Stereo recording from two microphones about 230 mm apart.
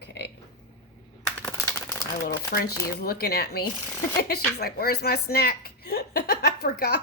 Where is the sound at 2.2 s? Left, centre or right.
Left.